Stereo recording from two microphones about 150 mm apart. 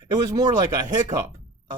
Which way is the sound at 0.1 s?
25° right (ahead or behind).